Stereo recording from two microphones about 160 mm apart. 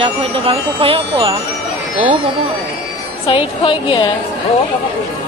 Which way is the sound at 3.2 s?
35° left (ahead or behind).